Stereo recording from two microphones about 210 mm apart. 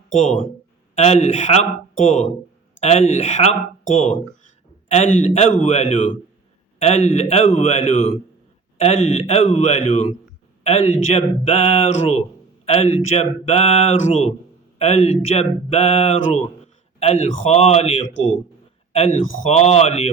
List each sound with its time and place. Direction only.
0.1 s a man's voice: 35° left (ahead or behind)